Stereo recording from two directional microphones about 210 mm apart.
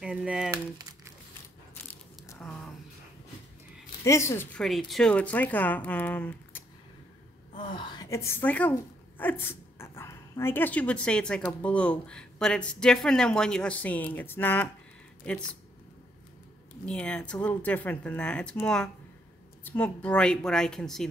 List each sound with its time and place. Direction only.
0.0 s speech: 5° right (ahead or behind)
0.5 s speech: 15° right (ahead or behind)
1.9 s a sound: 5° left (ahead or behind)
4.0 s speech: 15° left (ahead or behind)
4.6 s speech: centre (ahead or behind)
7.7 s speech: 20° left (ahead or behind)
16.8 s speech: 5° left (ahead or behind)